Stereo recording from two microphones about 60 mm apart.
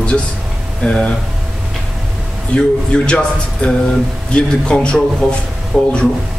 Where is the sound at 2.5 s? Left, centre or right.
Centre.